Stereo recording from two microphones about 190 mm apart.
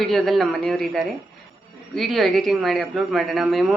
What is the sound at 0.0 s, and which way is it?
A woman's voice, centre (ahead or behind).